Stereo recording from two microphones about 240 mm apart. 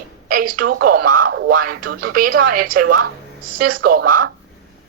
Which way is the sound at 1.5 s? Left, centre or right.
Right.